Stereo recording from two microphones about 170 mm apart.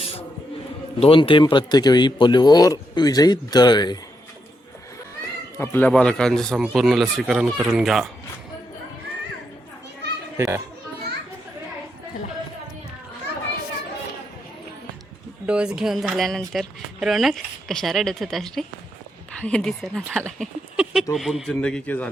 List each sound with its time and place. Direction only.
0.9 s speech: 35° left (ahead or behind)
5.5 s speech: 15° left (ahead or behind)
10.3 s a child's voice: 15° right (ahead or behind)
15.4 s speech: 5° right (ahead or behind)